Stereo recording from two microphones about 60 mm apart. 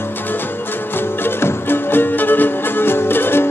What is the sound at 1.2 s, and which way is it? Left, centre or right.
Music, left.